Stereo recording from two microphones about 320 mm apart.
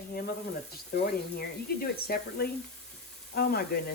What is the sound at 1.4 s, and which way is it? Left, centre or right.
Speech, left.